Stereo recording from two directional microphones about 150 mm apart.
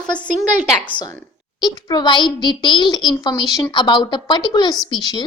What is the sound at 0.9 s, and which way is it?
A woman's voice, 30° left (ahead or behind).